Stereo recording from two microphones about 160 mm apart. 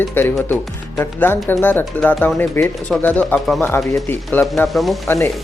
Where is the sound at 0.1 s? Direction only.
15° left (ahead or behind).